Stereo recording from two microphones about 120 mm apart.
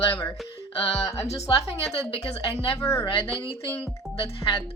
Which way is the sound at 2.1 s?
55° left (ahead or behind).